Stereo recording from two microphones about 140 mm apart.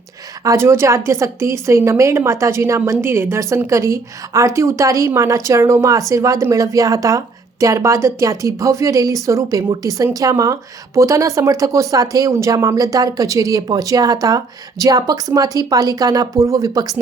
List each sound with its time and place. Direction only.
0.4 s a woman's voice: 20° right (ahead or behind)